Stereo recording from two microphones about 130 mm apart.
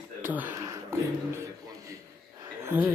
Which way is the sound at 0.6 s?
25° right (ahead or behind).